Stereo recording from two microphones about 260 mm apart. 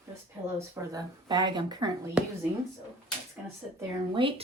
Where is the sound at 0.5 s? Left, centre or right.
Centre.